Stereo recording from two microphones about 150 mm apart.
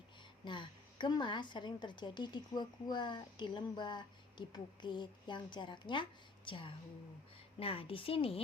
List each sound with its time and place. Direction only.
0.4 s a woman's voice: 30° left (ahead or behind)